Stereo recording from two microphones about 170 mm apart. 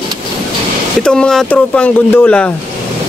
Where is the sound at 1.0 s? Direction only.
5° left (ahead or behind).